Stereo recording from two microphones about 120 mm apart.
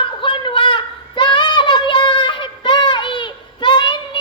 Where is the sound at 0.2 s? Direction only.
45° left (ahead or behind).